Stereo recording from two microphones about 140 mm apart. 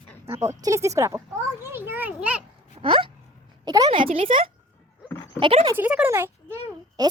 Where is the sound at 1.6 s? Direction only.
15° right (ahead or behind).